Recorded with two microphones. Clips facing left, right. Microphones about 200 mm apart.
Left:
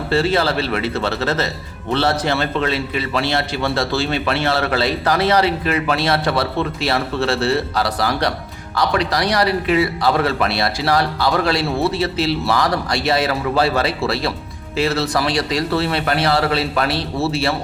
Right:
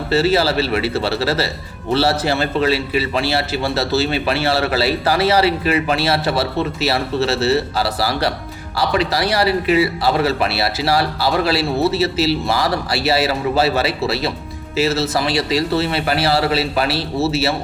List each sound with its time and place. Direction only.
0.1 s a man's voice: 5° right (ahead or behind)
4.4 s a man's voice: 30° right (ahead or behind)
4.7 s a man's voice: 5° right (ahead or behind)